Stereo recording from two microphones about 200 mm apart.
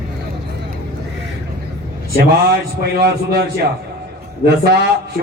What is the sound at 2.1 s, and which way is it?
A man's voice, 50° right (ahead or behind).